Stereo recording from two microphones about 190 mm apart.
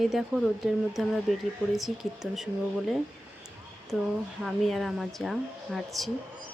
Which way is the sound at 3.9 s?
5° right (ahead or behind).